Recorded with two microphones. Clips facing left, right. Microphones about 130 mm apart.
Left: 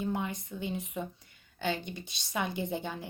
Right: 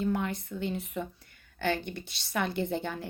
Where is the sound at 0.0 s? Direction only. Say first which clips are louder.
Right 3 dB; 15° left (ahead or behind).